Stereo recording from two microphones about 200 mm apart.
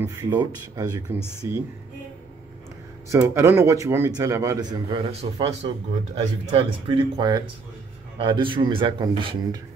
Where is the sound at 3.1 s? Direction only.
10° right (ahead or behind).